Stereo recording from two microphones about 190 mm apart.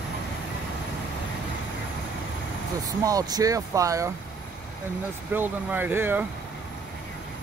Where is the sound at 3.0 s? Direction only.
20° right (ahead or behind).